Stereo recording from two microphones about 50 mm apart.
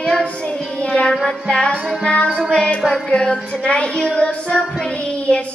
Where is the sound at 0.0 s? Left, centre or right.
Left.